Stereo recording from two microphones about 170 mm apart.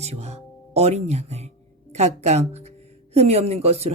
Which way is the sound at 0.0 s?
40° right (ahead or behind).